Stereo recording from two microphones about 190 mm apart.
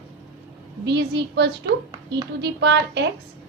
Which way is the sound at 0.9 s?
60° right (ahead or behind).